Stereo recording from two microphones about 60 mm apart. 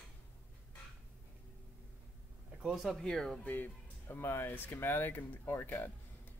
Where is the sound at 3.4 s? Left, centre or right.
Left.